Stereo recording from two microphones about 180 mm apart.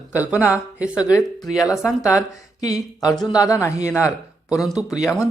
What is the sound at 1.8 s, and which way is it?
A man's voice, 15° left (ahead or behind).